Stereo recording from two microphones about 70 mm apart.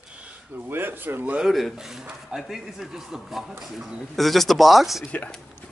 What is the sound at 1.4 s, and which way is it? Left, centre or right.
Speech, centre.